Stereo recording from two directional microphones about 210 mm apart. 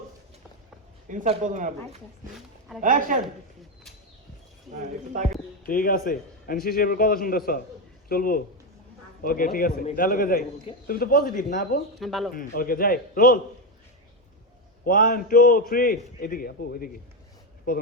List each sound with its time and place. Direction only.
1.0 s speech: 35° right (ahead or behind)
5.6 s a man's voice: 45° left (ahead or behind)
11.9 s speech: centre (ahead or behind)
12.3 s a man's voice: 40° left (ahead or behind)
14.8 s a man's voice: 40° left (ahead or behind)